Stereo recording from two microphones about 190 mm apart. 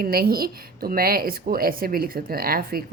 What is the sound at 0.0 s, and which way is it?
Speech, 50° right (ahead or behind).